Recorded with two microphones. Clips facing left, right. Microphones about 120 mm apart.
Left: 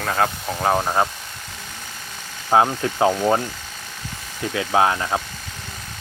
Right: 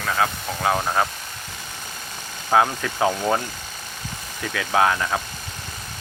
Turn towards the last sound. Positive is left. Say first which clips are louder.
# left 1 dB
turn(degrees=20)  # may be behind; listen again after turning